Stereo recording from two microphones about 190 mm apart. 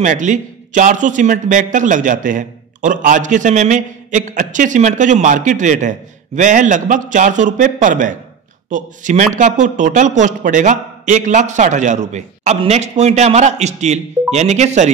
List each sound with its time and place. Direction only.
0.0 s a man's voice: 40° right (ahead or behind)